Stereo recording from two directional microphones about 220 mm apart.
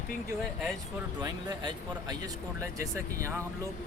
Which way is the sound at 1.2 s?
20° right (ahead or behind).